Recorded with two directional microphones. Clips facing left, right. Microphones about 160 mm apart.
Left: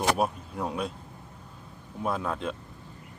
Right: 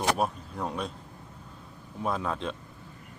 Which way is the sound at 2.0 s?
Centre (ahead or behind).